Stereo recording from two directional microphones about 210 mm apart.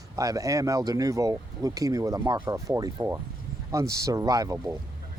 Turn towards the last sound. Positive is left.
turn(degrees=-15)  # may be behind; listen again after turning